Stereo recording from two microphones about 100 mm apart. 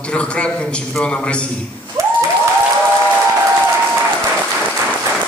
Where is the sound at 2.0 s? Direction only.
35° right (ahead or behind).